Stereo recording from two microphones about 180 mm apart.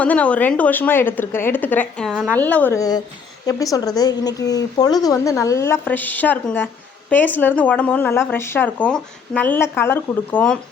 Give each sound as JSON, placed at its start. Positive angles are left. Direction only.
{"t": 0.0, "sound": "a woman's voice", "side_deg": 5}